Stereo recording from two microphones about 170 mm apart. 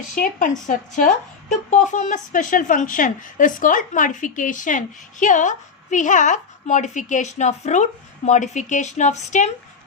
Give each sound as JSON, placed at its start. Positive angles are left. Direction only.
{"t": 0.2, "sound": "a woman's voice", "side_deg": 50}